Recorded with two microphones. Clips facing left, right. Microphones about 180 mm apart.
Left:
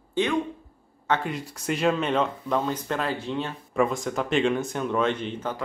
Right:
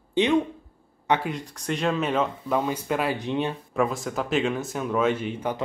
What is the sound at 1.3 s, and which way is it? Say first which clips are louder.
Speech: even; 5° left (ahead or behind).